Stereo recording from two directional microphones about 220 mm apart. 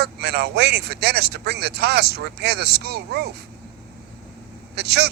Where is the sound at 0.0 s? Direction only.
45° right (ahead or behind).